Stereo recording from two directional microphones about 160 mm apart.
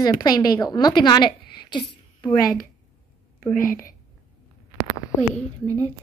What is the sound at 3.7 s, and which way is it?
Speech, 60° left (ahead or behind).